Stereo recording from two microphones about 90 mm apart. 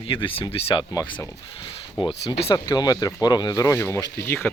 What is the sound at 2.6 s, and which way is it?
Speech, 45° left (ahead or behind).